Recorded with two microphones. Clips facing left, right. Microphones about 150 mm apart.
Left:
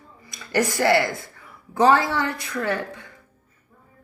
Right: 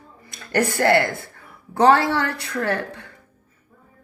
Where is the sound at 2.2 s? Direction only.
70° right (ahead or behind).